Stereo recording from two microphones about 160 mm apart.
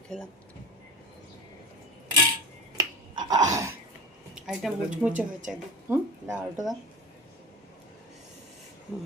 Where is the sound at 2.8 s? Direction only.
25° right (ahead or behind).